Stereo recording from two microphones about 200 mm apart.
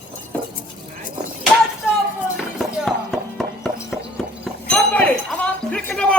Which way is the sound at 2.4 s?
Centre (ahead or behind).